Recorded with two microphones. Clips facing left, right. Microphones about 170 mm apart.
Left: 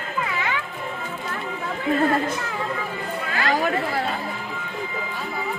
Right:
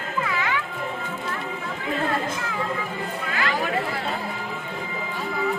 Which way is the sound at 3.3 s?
40° left (ahead or behind).